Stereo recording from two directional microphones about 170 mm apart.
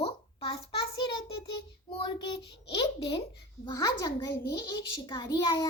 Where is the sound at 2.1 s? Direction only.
25° left (ahead or behind).